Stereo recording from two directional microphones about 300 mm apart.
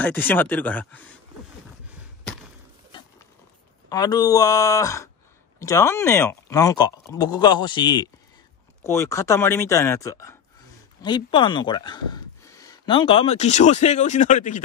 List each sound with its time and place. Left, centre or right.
0.0 s speech: centre
3.9 s speech: centre